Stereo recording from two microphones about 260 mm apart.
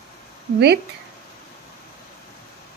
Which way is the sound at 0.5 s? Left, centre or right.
Right.